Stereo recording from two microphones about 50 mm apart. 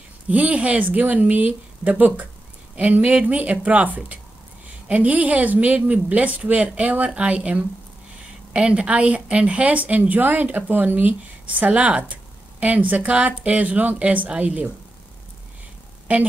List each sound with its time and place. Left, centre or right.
0.3 s a woman's voice: right